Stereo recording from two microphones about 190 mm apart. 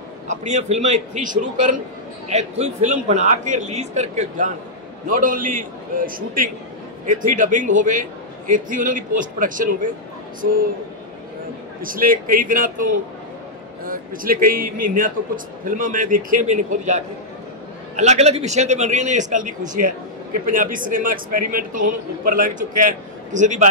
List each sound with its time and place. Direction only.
0.3 s a man's voice: 40° right (ahead or behind)
11.8 s a man's voice: 45° right (ahead or behind)